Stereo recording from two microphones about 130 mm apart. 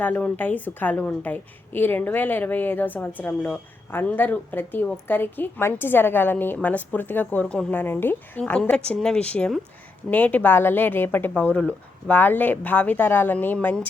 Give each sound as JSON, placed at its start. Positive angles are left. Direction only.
{"t": 0.0, "sound": "speech", "side_deg": 15}